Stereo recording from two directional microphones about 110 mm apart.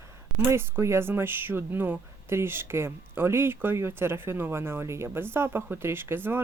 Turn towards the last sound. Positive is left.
turn(degrees=-20)  # may be behind; listen again after turning